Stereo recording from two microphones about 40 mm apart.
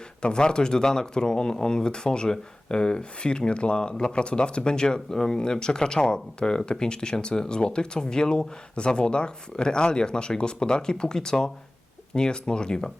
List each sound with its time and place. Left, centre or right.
0.2 s speech: left